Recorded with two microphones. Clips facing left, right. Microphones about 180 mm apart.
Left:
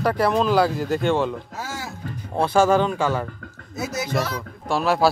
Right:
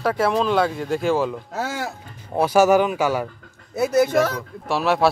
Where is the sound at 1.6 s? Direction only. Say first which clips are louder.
Right 6 dB; 65° right (ahead or behind).